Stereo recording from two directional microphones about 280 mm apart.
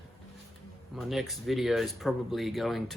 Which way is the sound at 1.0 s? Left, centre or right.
Centre.